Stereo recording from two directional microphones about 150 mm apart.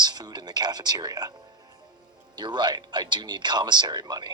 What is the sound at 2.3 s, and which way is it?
Speech, 30° right (ahead or behind).